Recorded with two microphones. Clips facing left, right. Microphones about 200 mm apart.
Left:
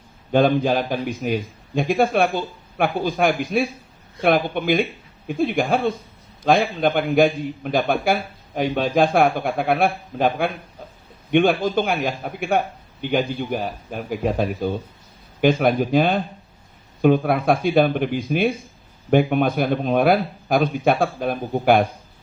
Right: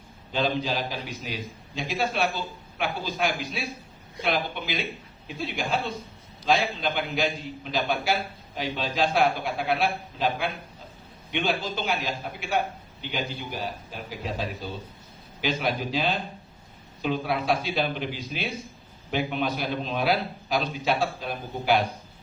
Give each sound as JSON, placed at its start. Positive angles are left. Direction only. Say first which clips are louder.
{"t": 0.3, "sound": "a man's voice", "louder": "left 10 dB", "side_deg": 55}